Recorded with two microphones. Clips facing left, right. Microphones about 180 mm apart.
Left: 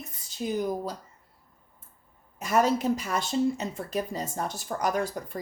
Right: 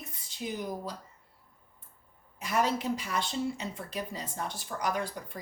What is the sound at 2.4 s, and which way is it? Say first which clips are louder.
Speech: left 5 dB; 45° left (ahead or behind).